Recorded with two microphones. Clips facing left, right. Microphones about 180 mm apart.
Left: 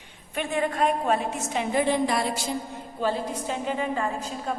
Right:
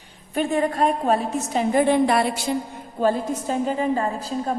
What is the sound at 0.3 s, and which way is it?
A woman's voice, 40° right (ahead or behind).